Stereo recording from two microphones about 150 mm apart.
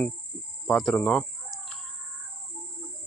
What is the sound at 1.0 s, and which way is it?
Chicken, 5° left (ahead or behind).